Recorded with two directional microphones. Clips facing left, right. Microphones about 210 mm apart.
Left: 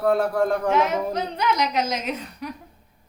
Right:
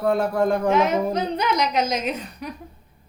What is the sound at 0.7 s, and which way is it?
A woman's voice, 20° right (ahead or behind).